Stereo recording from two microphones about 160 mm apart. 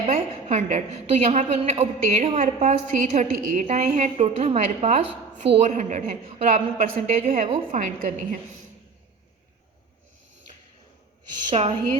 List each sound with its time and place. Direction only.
0.0 s a woman's voice: 45° right (ahead or behind)
11.5 s a woman's voice: 40° right (ahead or behind)